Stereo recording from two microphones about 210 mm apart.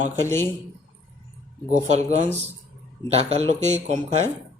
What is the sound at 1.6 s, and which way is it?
Speech, 35° right (ahead or behind).